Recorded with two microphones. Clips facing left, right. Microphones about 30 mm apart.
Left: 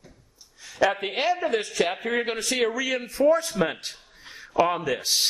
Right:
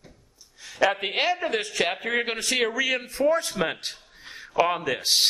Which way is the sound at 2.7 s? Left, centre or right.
Right.